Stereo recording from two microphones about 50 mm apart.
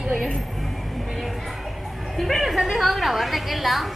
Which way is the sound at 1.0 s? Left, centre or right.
Centre.